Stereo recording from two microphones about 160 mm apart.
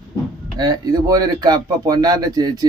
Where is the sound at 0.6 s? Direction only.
25° right (ahead or behind).